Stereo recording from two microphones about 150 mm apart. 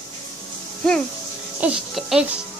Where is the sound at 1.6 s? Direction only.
5° right (ahead or behind).